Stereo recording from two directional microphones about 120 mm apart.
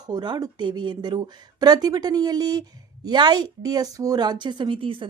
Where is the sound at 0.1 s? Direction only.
35° right (ahead or behind).